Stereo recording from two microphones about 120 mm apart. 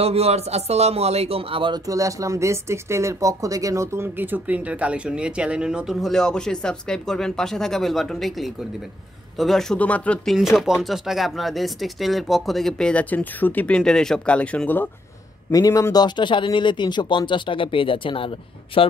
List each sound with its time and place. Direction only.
0.0 s a man's voice: 60° right (ahead or behind)
1.9 s speech: 30° right (ahead or behind); by 10.3 s 10° left (ahead or behind)
10.3 s speech: 5° right (ahead or behind); by 14.9 s 15° left (ahead or behind)
15.5 s speech: 30° left (ahead or behind); by 18.9 s 50° left (ahead or behind)